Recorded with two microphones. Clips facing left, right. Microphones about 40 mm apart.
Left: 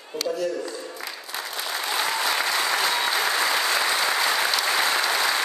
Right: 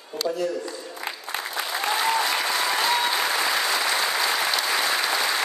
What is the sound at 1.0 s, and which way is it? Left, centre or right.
Applause, right.